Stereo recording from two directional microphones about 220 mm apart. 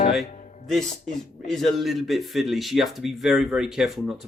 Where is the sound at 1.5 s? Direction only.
Centre (ahead or behind).